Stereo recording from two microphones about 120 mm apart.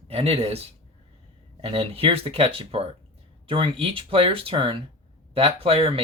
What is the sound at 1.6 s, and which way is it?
Speech, 55° right (ahead or behind).